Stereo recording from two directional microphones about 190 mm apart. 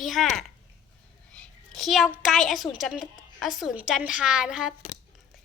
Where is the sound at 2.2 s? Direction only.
Centre (ahead or behind).